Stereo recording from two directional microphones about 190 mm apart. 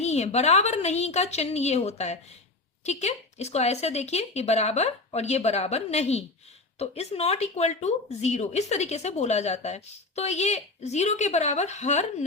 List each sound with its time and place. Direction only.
0.0 s speech: 35° left (ahead or behind)